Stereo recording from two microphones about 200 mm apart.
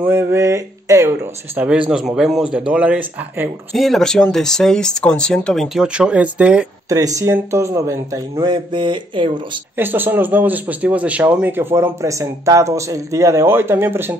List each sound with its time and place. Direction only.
0.0 s speech: 10° right (ahead or behind)
6.9 s a man's voice: 15° right (ahead or behind)
9.8 s a man's voice: 10° right (ahead or behind)